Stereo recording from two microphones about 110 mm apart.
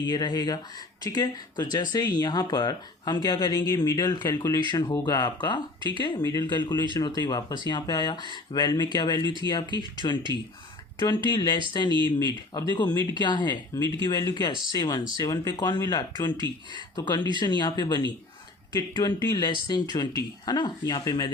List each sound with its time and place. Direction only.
0.1 s speech: 40° left (ahead or behind)
14.0 s speech: 25° left (ahead or behind)
14.7 s speech: 40° left (ahead or behind)